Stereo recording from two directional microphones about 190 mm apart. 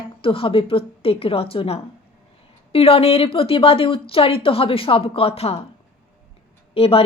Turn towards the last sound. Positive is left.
turn(degrees=30)  # may be behind; listen again after turning